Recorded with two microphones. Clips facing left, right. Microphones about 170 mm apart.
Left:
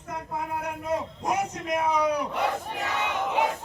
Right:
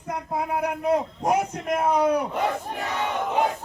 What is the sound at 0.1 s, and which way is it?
Speech, 70° right (ahead or behind).